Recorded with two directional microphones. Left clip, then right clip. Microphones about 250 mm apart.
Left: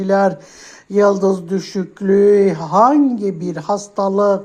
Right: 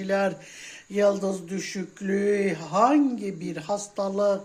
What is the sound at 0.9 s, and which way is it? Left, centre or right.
Speech, centre.